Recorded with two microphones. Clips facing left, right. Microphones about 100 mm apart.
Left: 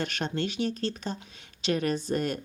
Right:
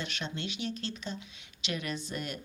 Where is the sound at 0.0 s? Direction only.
45° left (ahead or behind).